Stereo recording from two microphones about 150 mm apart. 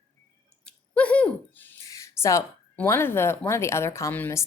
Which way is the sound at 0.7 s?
10° left (ahead or behind).